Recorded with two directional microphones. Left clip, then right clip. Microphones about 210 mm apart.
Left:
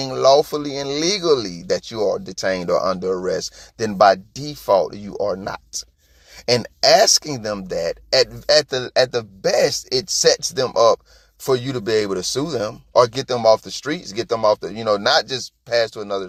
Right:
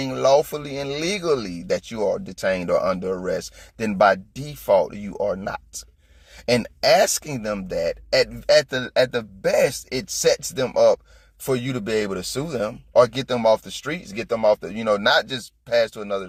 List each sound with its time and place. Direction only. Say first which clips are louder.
0.0 s speech: left 3 dB; 30° left (ahead or behind)